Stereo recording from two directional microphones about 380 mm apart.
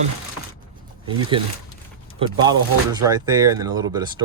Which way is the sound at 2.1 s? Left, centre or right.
Centre.